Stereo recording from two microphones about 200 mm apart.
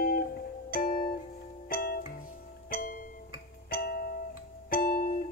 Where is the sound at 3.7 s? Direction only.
50° left (ahead or behind).